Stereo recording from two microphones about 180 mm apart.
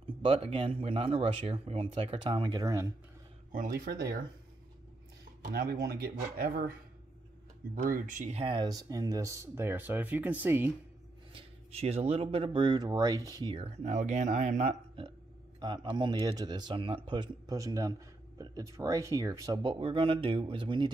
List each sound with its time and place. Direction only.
0.2 s speech: 30° right (ahead or behind)
3.5 s speech: 50° right (ahead or behind)
5.5 s speech: 55° right (ahead or behind)
7.7 s speech: 45° right (ahead or behind); by 10.7 s 10° right (ahead or behind)
11.3 s speech: 35° right (ahead or behind)
15.6 s speech: 25° right (ahead or behind)